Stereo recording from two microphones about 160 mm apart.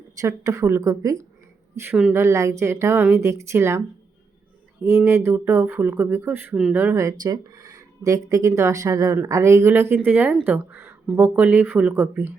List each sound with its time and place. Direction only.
0.2 s speech: 20° right (ahead or behind)